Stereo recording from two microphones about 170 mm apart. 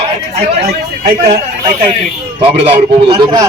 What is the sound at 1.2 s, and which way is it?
Speech, 55° right (ahead or behind).